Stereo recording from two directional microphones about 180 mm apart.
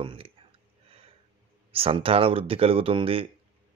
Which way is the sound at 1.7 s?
30° right (ahead or behind).